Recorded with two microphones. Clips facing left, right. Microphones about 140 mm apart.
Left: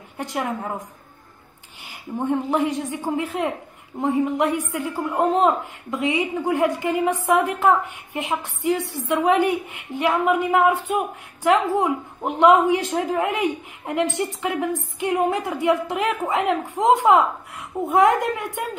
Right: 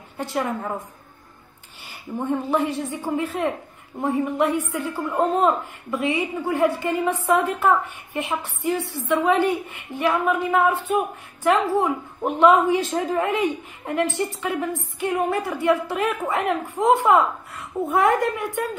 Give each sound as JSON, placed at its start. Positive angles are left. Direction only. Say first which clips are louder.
{"t": 0.2, "sound": "a man's voice", "louder": "right 1 dB", "side_deg": 15}
{"t": 1.8, "sound": "a man's voice", "louder": "left 2 dB", "side_deg": 15}